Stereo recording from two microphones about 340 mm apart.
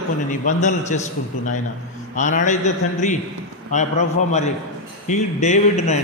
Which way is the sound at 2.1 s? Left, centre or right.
Left.